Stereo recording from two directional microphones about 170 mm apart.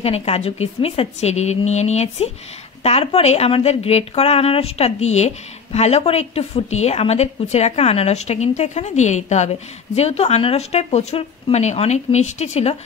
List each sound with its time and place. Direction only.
0.0 s a woman's voice: 35° left (ahead or behind)